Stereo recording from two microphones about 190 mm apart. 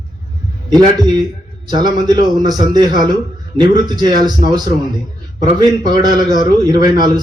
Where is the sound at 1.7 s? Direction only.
20° right (ahead or behind).